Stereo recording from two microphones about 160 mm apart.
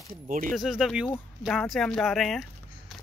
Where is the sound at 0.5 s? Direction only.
Centre (ahead or behind).